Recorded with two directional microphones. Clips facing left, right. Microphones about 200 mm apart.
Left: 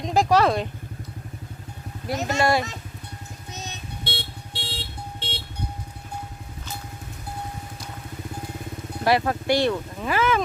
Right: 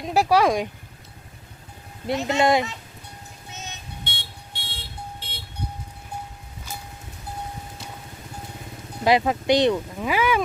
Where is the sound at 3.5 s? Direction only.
35° left (ahead or behind).